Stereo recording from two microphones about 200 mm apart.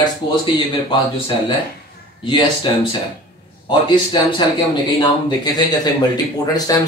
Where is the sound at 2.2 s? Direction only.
20° left (ahead or behind).